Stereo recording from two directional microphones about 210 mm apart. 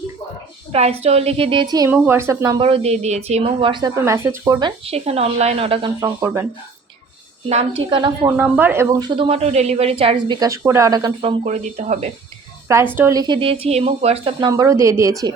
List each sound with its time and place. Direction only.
0.7 s a woman's voice: 30° right (ahead or behind); by 4.7 s 15° right (ahead or behind)
4.9 s a woman's voice: 30° right (ahead or behind)
6.1 s a woman's voice: 15° right (ahead or behind)
7.5 s a woman's voice: 25° right (ahead or behind)
8.4 s a woman's voice: 10° right (ahead or behind); by 12.1 s 30° right (ahead or behind)
12.6 s a woman's voice: 10° right (ahead or behind)